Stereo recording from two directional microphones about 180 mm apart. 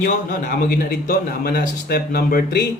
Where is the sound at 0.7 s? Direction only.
60° left (ahead or behind).